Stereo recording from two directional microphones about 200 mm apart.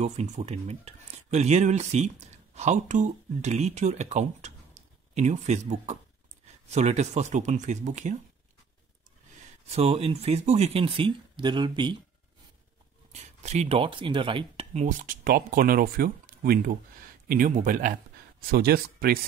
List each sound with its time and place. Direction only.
0.0 s speech: 35° right (ahead or behind)
9.7 s speech: 30° right (ahead or behind)
13.1 s speech: 35° right (ahead or behind)